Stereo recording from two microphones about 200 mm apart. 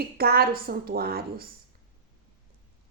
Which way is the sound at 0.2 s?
50° right (ahead or behind).